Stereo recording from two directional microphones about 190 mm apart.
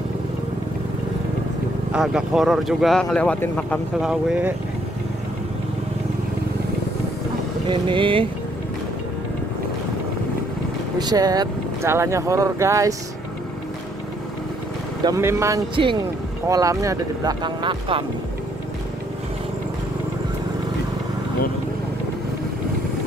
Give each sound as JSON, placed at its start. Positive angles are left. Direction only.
{"t": 1.9, "sound": "speech", "side_deg": -5}
{"t": 4.1, "sound": "speech", "side_deg": -5}
{"t": 7.6, "sound": "speech", "side_deg": -25}
{"t": 11.0, "sound": "speech", "side_deg": -20}
{"t": 15.0, "sound": "speech", "side_deg": -15}
{"t": 15.7, "sound": "speech", "side_deg": -25}